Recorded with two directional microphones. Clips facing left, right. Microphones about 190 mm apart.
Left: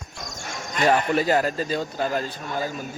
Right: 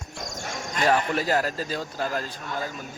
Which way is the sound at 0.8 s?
Centre (ahead or behind).